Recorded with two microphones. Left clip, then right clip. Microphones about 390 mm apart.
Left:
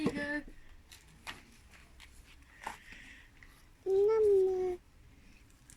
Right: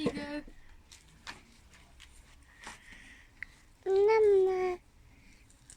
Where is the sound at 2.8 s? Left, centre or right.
Centre.